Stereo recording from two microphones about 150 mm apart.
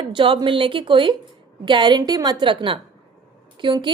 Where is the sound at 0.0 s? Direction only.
30° right (ahead or behind).